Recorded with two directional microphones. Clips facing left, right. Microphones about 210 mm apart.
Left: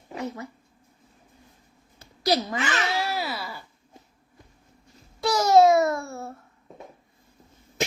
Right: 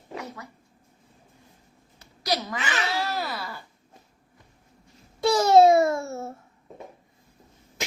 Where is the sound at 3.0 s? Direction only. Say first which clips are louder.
Left 1 dB; 10° left (ahead or behind).